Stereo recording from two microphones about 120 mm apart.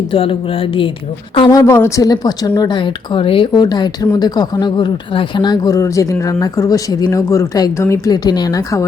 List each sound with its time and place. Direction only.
0.1 s speech: 50° left (ahead or behind)
1.5 s a woman's voice: 25° left (ahead or behind)